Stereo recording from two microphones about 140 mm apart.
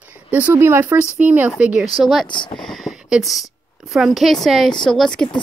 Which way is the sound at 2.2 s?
35° left (ahead or behind).